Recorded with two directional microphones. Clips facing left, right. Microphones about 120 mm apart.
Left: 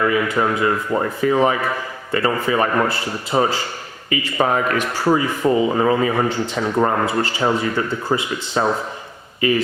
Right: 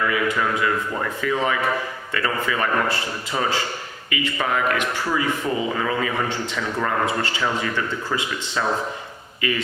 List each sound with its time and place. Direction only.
0.0 s speech: 30° left (ahead or behind)